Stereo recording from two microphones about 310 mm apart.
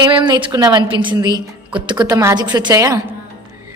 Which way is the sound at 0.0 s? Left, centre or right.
Centre.